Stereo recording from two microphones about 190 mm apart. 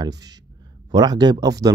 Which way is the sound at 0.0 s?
20° right (ahead or behind).